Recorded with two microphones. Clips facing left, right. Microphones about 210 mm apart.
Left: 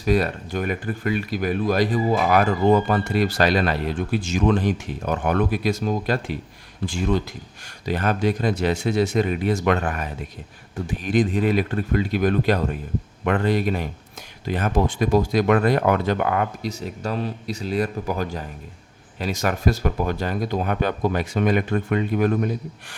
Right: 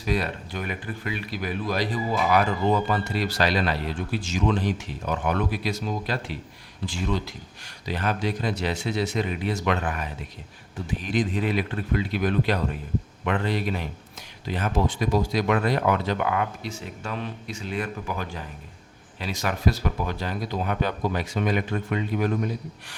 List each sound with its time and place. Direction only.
0.0 s speech: 45° left (ahead or behind)